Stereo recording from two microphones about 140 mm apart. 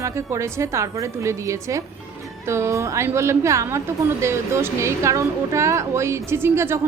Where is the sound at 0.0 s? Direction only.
20° right (ahead or behind).